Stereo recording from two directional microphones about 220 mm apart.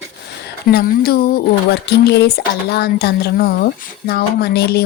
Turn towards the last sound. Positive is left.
turn(degrees=45)  # may be behind; listen again after turning